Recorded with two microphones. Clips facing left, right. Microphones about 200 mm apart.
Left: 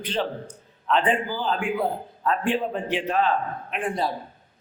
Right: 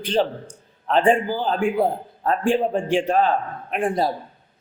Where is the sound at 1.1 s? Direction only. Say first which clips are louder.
Right 4 dB; 45° right (ahead or behind).